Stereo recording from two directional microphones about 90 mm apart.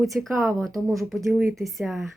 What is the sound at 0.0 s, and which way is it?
Speech, centre (ahead or behind).